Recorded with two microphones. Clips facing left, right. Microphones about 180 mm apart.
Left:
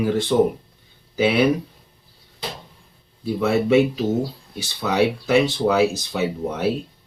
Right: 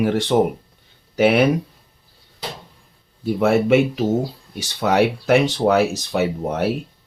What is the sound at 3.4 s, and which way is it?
Speech, 70° right (ahead or behind).